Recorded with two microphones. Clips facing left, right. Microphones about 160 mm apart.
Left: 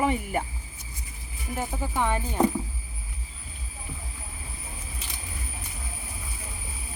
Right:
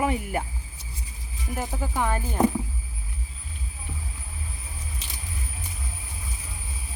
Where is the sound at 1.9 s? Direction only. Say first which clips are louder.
Even; centre (ahead or behind).